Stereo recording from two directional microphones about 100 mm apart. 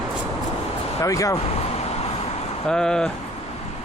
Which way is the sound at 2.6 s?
5° left (ahead or behind).